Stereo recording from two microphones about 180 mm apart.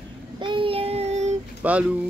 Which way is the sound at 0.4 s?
25° right (ahead or behind).